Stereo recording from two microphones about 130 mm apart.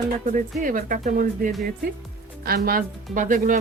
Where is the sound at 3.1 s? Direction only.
90° right.